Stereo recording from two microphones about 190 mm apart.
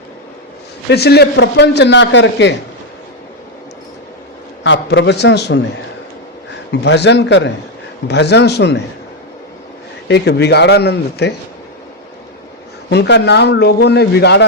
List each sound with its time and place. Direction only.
0.9 s a man's voice: 60° left (ahead or behind)
4.6 s a man's voice: 70° left (ahead or behind)
6.7 s a man's voice: 65° left (ahead or behind)
10.1 s a man's voice: 65° left (ahead or behind)
12.9 s a man's voice: 65° left (ahead or behind)